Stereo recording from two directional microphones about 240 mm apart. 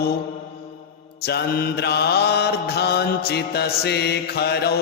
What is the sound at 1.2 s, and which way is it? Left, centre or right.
Mantra, left.